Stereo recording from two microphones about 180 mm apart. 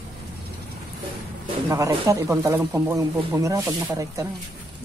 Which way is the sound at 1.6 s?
15° right (ahead or behind).